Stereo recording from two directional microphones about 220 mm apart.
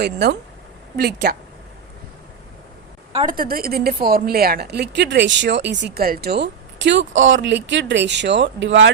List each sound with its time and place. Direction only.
0.0 s speech: 50° right (ahead or behind)
3.1 s speech: 25° right (ahead or behind)
3.3 s speech: 40° right (ahead or behind)